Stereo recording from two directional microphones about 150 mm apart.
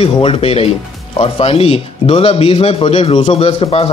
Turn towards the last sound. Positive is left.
turn(degrees=40)  # may be behind; listen again after turning